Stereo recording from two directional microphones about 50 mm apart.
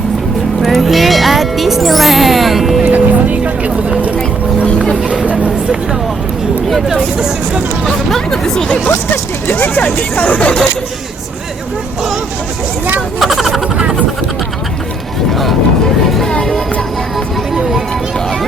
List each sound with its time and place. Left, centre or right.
0.6 s music: centre
2.8 s music: right
5.2 s vehicle: right
6.8 s speech: centre
7.9 s speech: centre
9.5 s speech: left
13.1 s speech: centre
15.3 s music: centre